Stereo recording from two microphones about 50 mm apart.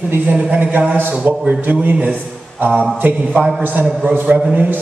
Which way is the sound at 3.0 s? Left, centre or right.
Right.